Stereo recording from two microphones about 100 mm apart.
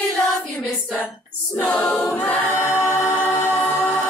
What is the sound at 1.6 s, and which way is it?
A capella, 10° left (ahead or behind).